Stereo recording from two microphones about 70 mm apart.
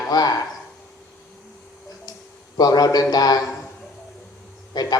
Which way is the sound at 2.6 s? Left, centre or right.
Left.